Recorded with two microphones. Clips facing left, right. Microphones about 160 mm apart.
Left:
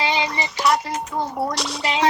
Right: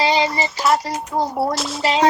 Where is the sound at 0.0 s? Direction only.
35° right (ahead or behind).